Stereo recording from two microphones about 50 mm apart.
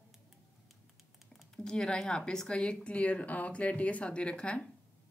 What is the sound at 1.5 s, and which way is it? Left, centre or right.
A woman's voice, centre.